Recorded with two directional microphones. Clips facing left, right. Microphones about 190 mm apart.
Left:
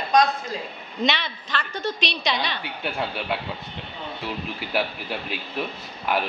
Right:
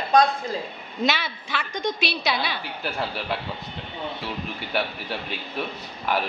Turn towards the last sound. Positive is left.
turn(degrees=0)  # may be behind; listen again after turning